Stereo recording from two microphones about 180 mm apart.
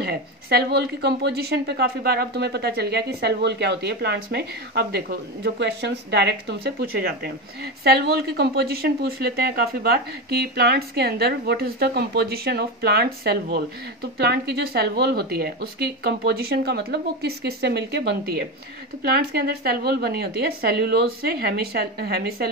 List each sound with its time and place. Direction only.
0.0 s a woman's voice: 60° right (ahead or behind)